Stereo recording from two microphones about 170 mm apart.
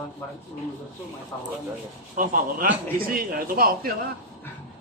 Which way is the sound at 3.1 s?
60° right (ahead or behind).